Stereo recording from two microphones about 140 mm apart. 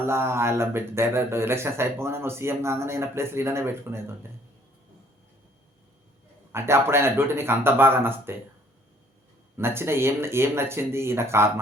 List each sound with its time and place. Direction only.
0.0 s a man's voice: 20° right (ahead or behind)
6.5 s a man's voice: 20° right (ahead or behind)
9.6 s a man's voice: 15° right (ahead or behind)